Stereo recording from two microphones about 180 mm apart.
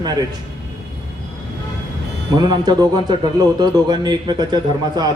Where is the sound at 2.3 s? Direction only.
25° right (ahead or behind).